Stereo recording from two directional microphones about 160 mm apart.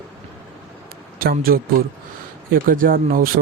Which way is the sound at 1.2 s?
65° right (ahead or behind).